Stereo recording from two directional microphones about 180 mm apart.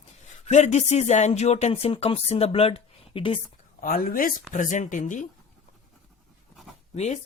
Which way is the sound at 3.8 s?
55° left (ahead or behind).